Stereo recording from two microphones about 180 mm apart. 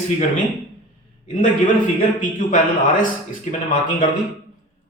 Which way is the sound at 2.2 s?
45° left (ahead or behind).